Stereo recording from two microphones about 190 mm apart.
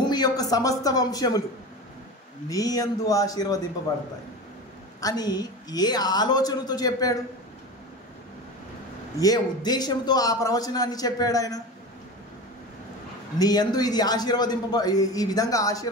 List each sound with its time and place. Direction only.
0.0 s speech: 20° left (ahead or behind)
2.5 s a man's voice: 20° left (ahead or behind)
5.0 s a man's voice: 20° left (ahead or behind)
9.2 s a man's voice: 20° left (ahead or behind)
13.4 s a man's voice: 20° left (ahead or behind)